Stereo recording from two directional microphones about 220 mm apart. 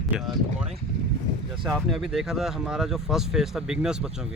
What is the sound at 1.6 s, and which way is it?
Speech, centre (ahead or behind).